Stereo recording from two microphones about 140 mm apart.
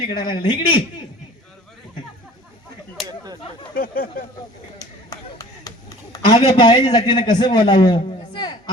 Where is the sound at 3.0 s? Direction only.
25° right (ahead or behind).